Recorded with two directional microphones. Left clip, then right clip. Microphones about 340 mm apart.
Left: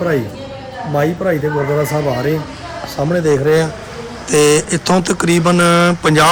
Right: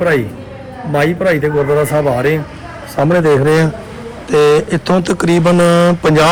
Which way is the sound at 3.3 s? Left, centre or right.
Right.